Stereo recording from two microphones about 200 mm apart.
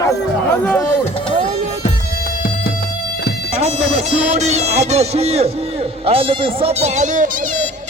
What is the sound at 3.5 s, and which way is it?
Speech, 35° right (ahead or behind).